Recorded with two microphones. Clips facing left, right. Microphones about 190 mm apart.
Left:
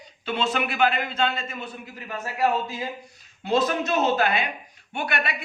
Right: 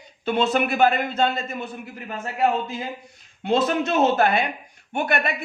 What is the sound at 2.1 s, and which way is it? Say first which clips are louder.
Speech: right 2 dB; 25° right (ahead or behind).